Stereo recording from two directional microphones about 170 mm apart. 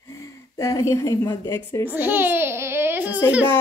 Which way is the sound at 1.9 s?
10° right (ahead or behind).